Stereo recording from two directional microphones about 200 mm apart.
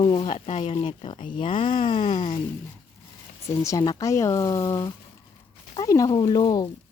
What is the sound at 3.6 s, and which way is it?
Speech, 20° left (ahead or behind).